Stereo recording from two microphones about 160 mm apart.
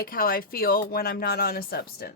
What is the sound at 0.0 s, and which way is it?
A woman's voice, 65° left (ahead or behind).